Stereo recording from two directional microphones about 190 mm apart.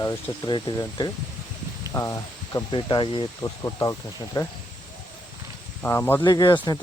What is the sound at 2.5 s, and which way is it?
Speech, 25° left (ahead or behind).